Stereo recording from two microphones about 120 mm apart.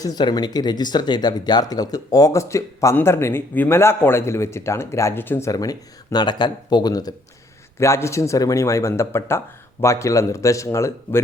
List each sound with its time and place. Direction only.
0.0 s speech: 35° left (ahead or behind); by 5.5 s 20° left (ahead or behind)
5.5 s speech: 30° left (ahead or behind)
7.8 s speech: 25° left (ahead or behind)